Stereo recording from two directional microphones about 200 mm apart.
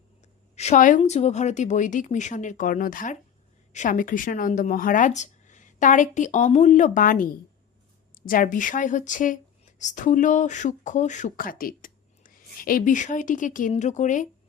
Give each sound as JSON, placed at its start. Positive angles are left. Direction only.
{"t": 0.5, "sound": "speech", "side_deg": 35}